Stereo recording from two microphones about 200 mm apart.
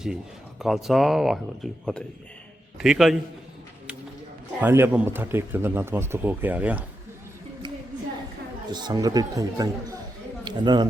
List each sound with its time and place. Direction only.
0.6 s a man's voice: centre (ahead or behind)
4.6 s speech: 10° right (ahead or behind)
8.7 s speech: 20° right (ahead or behind)